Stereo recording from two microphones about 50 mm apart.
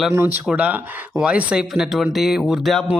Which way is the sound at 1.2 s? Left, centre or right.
Centre.